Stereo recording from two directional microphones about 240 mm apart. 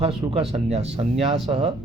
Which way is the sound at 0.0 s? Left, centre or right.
Right.